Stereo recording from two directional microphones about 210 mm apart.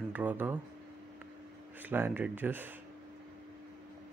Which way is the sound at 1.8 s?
10° right (ahead or behind).